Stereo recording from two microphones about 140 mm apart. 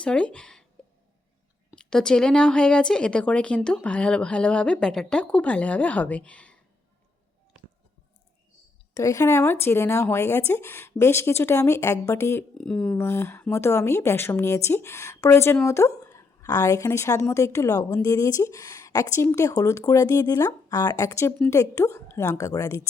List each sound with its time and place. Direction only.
0.0 s speech: 5° left (ahead or behind)
1.7 s speech: 5° left (ahead or behind)
9.0 s speech: 20° left (ahead or behind)
12.5 s speech: 5° left (ahead or behind)
13.0 s a woman's voice: 20° left (ahead or behind)